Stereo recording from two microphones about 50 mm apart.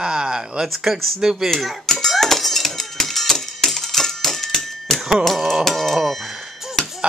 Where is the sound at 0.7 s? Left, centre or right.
Centre.